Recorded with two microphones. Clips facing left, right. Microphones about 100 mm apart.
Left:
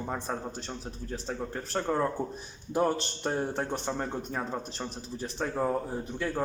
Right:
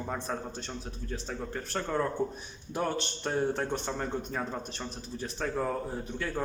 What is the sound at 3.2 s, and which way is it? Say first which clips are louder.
Speech: right 2 dB; 15° left (ahead or behind).